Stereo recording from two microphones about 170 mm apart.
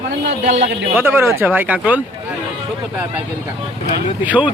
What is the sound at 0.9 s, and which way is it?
Speech, 15° right (ahead or behind).